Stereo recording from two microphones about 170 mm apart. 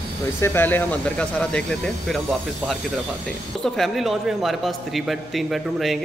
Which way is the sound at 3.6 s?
Centre (ahead or behind).